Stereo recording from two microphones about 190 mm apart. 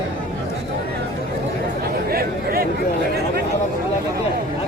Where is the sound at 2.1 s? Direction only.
55° right (ahead or behind).